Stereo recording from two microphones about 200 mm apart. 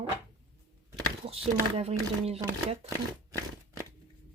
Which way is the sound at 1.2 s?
30° right (ahead or behind).